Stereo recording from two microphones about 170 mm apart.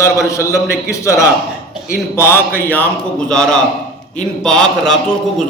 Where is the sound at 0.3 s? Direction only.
20° left (ahead or behind).